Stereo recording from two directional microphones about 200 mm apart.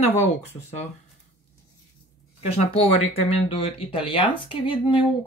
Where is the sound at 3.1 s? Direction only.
30° left (ahead or behind).